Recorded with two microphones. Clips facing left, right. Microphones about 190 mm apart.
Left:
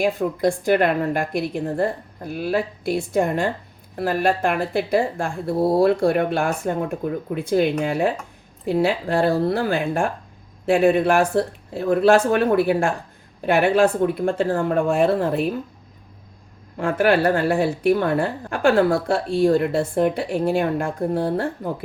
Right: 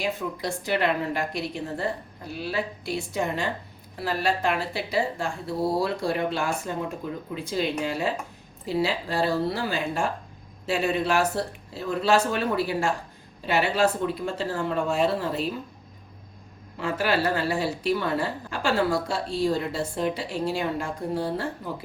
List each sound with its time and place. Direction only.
0.0 s a woman's voice: 50° left (ahead or behind)
16.7 s a woman's voice: 55° left (ahead or behind)